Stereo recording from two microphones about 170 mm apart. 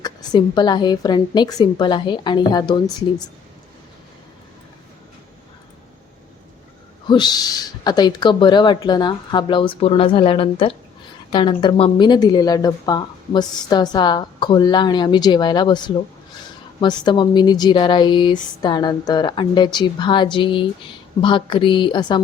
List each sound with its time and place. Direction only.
0.0 s speech: 25° left (ahead or behind)
7.1 s speech: 25° left (ahead or behind)
16.8 s speech: 25° left (ahead or behind)